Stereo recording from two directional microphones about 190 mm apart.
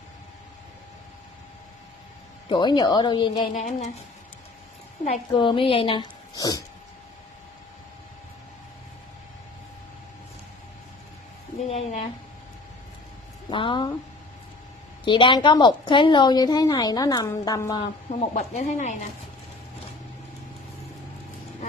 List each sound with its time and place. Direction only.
2.5 s a woman's voice: 25° left (ahead or behind)
3.5 s speech: 40° left (ahead or behind)
5.0 s a woman's voice: 30° left (ahead or behind)
6.3 s a woman's voice: 20° left (ahead or behind)
11.6 s a woman's voice: 35° left (ahead or behind)
13.5 s a woman's voice: 25° left (ahead or behind)
15.0 s a woman's voice: 25° left (ahead or behind)
18.3 s speech: 40° left (ahead or behind)